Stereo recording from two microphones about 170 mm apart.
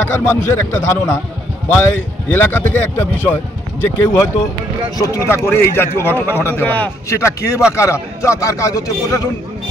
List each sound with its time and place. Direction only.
0.0 s a man's voice: 15° left (ahead or behind)
2.3 s a man's voice: 10° left (ahead or behind)